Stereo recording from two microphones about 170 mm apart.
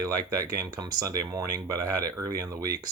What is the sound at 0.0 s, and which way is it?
Speech, 20° right (ahead or behind).